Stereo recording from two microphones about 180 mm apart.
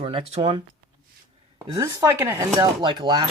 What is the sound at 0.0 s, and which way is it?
Speech, 30° right (ahead or behind).